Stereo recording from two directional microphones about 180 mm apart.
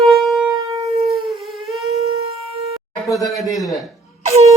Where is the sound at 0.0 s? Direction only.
Centre (ahead or behind).